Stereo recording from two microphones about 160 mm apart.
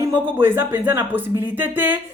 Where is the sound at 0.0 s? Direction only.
15° right (ahead or behind).